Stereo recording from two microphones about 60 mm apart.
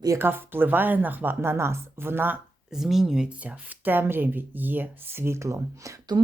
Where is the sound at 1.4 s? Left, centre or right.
Right.